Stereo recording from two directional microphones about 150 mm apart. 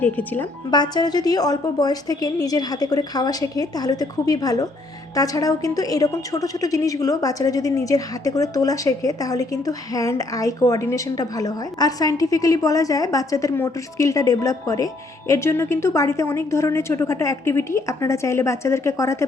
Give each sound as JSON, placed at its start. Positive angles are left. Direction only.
{"t": 0.0, "sound": "speech", "side_deg": 10}
{"t": 0.7, "sound": "speech", "side_deg": 30}